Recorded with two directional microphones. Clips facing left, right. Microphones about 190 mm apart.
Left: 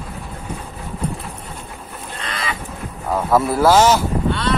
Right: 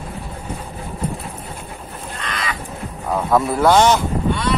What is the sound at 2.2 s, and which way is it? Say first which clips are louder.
Fowl: even; 25° left (ahead or behind).